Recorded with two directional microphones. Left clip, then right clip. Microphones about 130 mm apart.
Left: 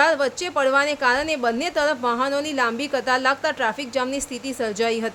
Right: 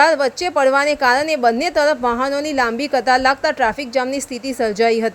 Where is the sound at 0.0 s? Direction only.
40° right (ahead or behind).